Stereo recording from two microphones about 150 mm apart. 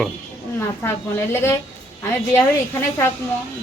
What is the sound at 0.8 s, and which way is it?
Speech, 20° left (ahead or behind).